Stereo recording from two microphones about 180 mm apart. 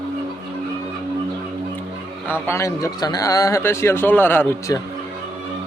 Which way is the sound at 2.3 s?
15° left (ahead or behind).